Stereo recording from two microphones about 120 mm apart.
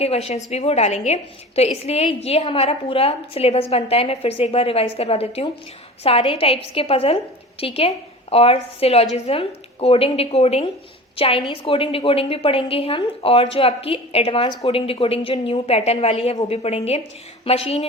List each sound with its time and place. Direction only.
0.0 s a woman's voice: 60° left (ahead or behind)
11.2 s a woman's voice: 45° left (ahead or behind)